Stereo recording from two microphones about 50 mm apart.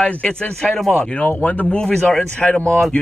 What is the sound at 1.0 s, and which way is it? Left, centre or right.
Speech, left.